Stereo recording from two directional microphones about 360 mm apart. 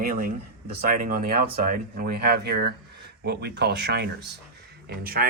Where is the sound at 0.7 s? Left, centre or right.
Right.